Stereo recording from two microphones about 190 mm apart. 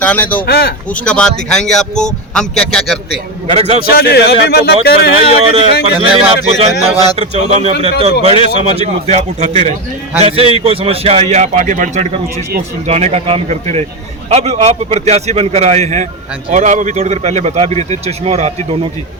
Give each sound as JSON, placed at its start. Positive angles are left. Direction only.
{"t": 0.0, "sound": "speech", "side_deg": 10}
{"t": 0.4, "sound": "speech", "side_deg": 55}
{"t": 1.0, "sound": "speech", "side_deg": 5}
{"t": 3.4, "sound": "a man's voice", "side_deg": -35}
{"t": 3.8, "sound": "speech", "side_deg": 55}
{"t": 5.4, "sound": "speech", "side_deg": -30}